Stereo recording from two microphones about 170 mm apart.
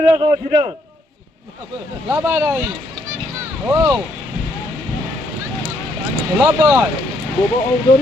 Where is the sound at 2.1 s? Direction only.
10° right (ahead or behind).